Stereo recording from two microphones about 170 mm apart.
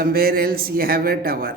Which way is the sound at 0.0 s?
60° right (ahead or behind).